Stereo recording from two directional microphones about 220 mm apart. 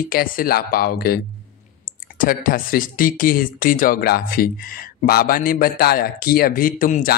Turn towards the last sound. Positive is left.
turn(degrees=40)  # may be behind; listen again after turning